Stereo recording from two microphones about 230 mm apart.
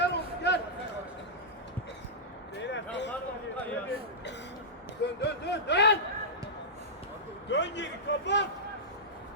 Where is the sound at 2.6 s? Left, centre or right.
Left.